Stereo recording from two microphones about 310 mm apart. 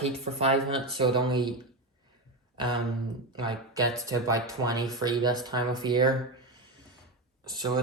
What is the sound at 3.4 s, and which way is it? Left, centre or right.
Speech, centre.